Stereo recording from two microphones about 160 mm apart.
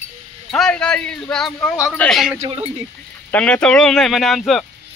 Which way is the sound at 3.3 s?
5° left (ahead or behind).